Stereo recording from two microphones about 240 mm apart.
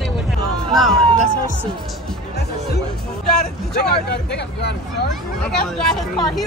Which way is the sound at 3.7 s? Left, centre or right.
Left.